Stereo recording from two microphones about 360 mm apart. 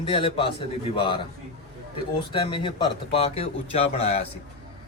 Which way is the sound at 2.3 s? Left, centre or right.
Centre.